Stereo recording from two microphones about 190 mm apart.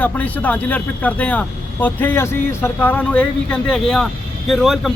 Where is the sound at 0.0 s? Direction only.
10° left (ahead or behind).